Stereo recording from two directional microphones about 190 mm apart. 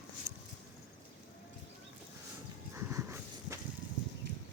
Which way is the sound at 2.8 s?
15° right (ahead or behind).